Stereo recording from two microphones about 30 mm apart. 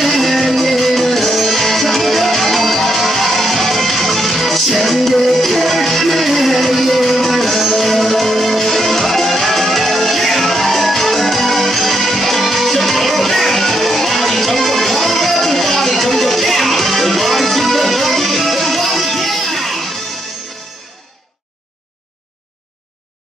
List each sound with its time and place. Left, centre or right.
0.0 s music: centre